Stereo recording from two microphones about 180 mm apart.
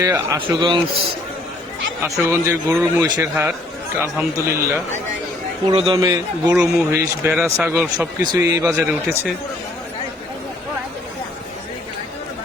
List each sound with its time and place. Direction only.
0.0 s speech: 15° right (ahead or behind)
0.4 s a man's voice: 25° right (ahead or behind)
2.3 s speech: 15° right (ahead or behind)
5.7 s a man's voice: 30° right (ahead or behind)
6.0 s a man's voice: 20° right (ahead or behind)